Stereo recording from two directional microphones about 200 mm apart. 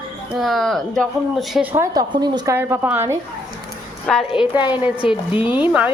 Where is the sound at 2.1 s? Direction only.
25° right (ahead or behind).